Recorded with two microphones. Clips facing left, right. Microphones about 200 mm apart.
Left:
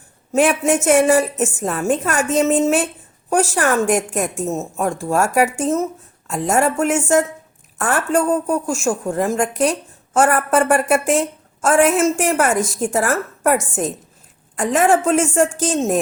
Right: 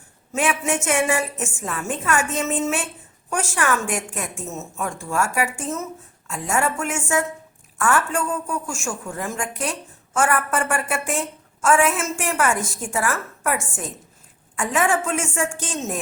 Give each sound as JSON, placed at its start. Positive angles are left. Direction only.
{"t": 0.3, "sound": "a woman's voice", "side_deg": 40}